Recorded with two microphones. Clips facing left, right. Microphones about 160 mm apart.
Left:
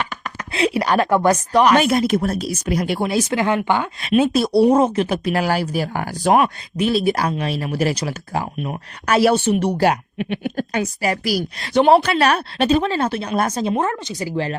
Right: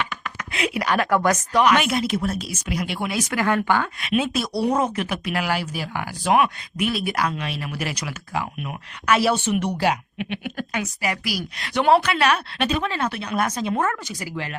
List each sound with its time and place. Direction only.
0.5 s speech: 30° left (ahead or behind)
4.0 s speech: 35° left (ahead or behind)
9.8 s speech: 45° left (ahead or behind)
13.7 s speech: 20° left (ahead or behind)